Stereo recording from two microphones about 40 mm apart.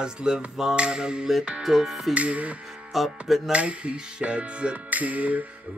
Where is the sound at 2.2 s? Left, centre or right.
Right.